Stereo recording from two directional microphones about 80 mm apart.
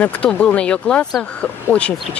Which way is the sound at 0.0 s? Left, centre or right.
Centre.